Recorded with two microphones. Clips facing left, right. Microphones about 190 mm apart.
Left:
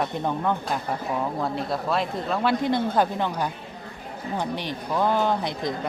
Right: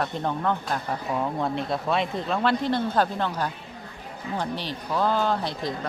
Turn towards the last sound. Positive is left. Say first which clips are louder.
# left 1 dB
turn(degrees=15)  # may be behind; listen again after turning